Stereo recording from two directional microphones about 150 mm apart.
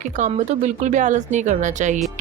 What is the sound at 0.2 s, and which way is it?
A woman's voice, 55° right (ahead or behind).